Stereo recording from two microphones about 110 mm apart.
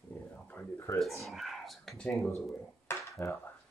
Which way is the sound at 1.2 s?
Centre (ahead or behind).